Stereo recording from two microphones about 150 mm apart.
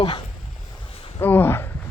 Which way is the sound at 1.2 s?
15° left (ahead or behind).